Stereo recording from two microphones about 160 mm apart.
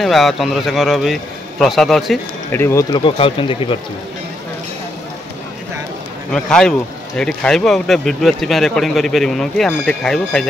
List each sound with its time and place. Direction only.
0.0 s speech: centre (ahead or behind)
2.5 s speech: 15° left (ahead or behind)
3.0 s speech: 35° left (ahead or behind)
6.3 s speech: 5° left (ahead or behind)